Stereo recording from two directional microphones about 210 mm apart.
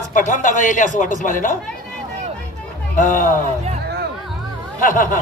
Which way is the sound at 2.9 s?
40° left (ahead or behind).